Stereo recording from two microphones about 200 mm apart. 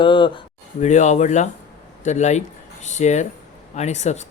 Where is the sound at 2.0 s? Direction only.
35° left (ahead or behind).